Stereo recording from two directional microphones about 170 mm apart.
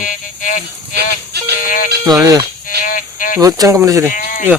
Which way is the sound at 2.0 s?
20° right (ahead or behind).